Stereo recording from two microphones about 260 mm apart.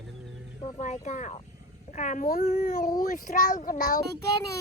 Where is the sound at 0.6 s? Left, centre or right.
Left.